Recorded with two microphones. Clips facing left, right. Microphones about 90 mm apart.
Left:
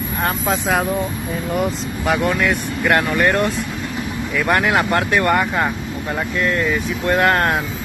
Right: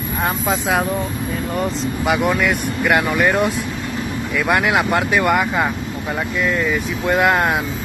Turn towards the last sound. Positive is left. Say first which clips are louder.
# even
turn(degrees=-5)  # may be behind; listen again after turning